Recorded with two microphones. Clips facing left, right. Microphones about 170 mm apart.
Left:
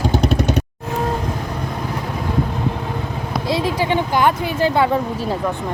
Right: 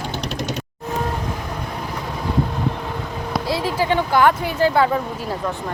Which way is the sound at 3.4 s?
20° left (ahead or behind).